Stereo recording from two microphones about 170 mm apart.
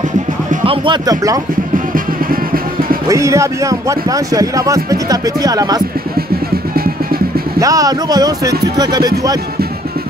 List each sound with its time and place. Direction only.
0.7 s speech: 25° right (ahead or behind)
3.1 s speech: 15° right (ahead or behind)
6.7 s music: 60° right (ahead or behind)
7.6 s speech: 20° right (ahead or behind)